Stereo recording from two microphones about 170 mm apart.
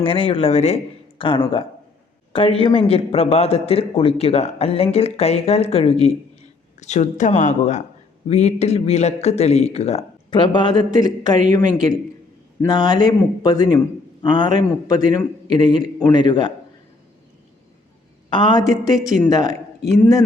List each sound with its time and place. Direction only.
0.0 s a man's voice: 30° left (ahead or behind)
10.2 s a man's voice: 25° left (ahead or behind)
18.3 s a man's voice: 30° left (ahead or behind)